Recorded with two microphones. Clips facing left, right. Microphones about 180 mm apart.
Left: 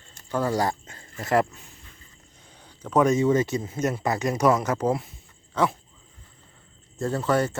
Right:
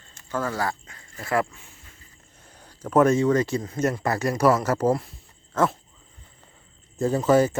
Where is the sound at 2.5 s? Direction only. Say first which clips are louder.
Right 2 dB; 10° right (ahead or behind).